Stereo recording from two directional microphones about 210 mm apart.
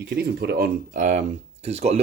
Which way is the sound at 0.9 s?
35° right (ahead or behind).